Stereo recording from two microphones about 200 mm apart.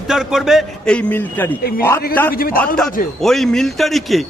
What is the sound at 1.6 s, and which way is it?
Speech, 50° left (ahead or behind).